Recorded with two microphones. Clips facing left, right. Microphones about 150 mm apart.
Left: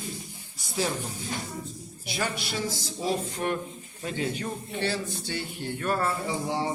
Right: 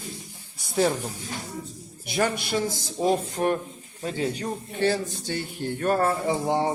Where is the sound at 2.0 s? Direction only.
50° right (ahead or behind).